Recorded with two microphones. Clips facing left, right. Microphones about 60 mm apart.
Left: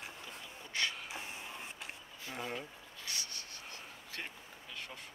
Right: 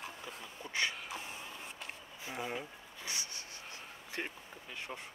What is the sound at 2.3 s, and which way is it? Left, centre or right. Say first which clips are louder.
Speech: right 1 dB; centre.